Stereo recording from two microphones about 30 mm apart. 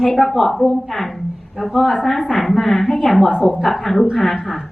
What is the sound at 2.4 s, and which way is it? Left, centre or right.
Speech, centre.